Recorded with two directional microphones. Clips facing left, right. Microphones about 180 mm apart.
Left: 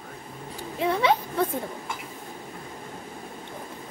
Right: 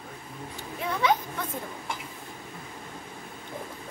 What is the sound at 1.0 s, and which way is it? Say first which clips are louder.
Speech: even; 30° left (ahead or behind).